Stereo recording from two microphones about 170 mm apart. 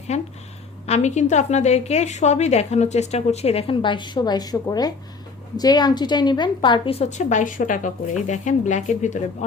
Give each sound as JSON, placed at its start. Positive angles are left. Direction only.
{"t": 0.1, "sound": "a woman's voice", "side_deg": 40}